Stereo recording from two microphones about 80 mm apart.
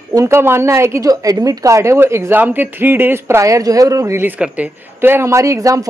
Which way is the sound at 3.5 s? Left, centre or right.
Right.